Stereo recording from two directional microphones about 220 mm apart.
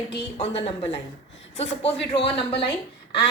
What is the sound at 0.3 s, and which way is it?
Speech, 25° left (ahead or behind).